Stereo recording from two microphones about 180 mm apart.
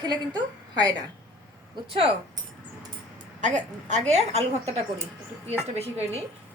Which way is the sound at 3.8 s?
40° right (ahead or behind).